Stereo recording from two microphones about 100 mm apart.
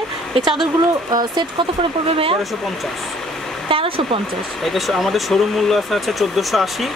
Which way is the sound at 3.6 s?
65° right (ahead or behind).